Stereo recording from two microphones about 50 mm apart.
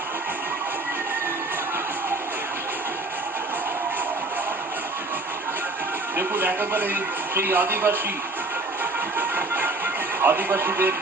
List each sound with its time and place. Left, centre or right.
6.1 s speech: right
8.8 s music: right